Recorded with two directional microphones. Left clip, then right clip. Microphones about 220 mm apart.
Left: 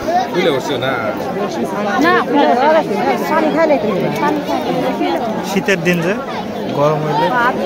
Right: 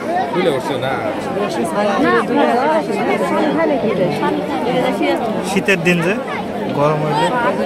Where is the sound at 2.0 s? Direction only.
45° left (ahead or behind).